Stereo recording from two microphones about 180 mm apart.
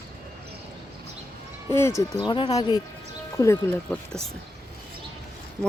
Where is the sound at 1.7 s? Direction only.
15° left (ahead or behind).